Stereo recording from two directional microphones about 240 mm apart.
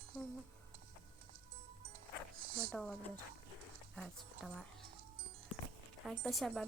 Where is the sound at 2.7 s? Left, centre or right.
Centre.